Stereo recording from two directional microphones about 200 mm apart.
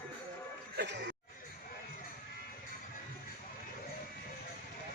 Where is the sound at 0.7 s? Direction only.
60° right (ahead or behind).